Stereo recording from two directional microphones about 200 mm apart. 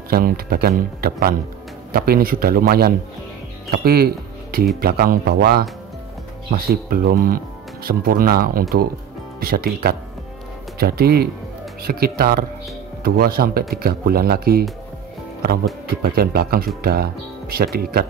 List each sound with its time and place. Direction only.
0.1 s speech: 50° right (ahead or behind)
15.9 s speech: 50° right (ahead or behind)